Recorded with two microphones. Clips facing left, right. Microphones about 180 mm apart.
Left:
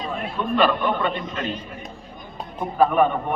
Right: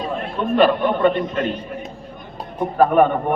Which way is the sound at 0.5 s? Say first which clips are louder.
Right 5 dB; 55° right (ahead or behind).